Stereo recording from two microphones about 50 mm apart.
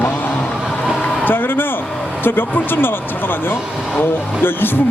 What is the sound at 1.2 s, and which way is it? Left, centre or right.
A man's voice, left.